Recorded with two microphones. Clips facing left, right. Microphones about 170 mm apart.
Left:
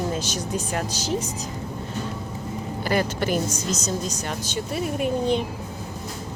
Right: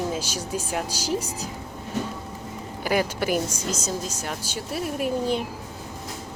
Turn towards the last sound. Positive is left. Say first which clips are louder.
# left 2 dB
turn(degrees=-5)  # may be behind; listen again after turning